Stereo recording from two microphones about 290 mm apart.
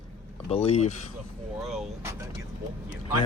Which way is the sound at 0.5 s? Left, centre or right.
Left.